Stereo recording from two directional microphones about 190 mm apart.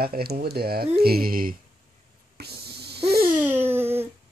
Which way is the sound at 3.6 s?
10° right (ahead or behind).